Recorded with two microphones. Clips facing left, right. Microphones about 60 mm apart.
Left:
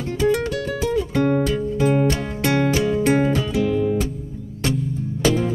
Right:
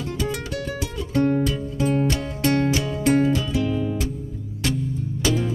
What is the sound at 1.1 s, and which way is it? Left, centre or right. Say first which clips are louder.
Music: right 2 dB; left.